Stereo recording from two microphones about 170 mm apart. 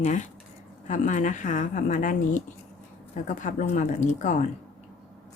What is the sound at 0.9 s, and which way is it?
A woman's voice, 50° left (ahead or behind).